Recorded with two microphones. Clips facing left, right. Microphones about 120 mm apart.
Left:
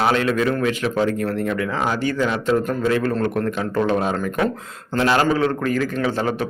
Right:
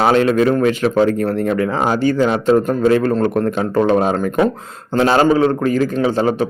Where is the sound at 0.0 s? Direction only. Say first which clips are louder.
Right 6 dB; 35° right (ahead or behind).